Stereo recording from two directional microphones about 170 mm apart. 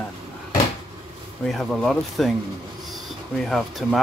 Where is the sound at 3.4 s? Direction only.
Centre (ahead or behind).